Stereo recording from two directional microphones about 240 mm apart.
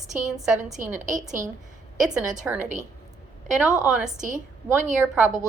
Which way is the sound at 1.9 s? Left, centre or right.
Centre.